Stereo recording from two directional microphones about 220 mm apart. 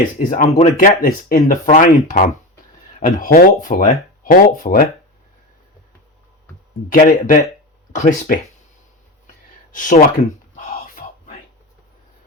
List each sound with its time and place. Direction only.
0.2 s speech: 35° left (ahead or behind)
6.9 s speech: 40° left (ahead or behind)
9.7 s speech: 35° left (ahead or behind)
10.5 s a sound: 40° left (ahead or behind)